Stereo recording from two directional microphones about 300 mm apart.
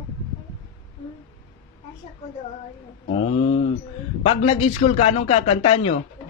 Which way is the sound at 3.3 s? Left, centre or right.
Centre.